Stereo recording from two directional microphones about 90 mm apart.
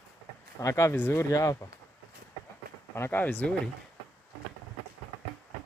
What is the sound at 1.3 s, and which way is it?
Speech, 40° left (ahead or behind).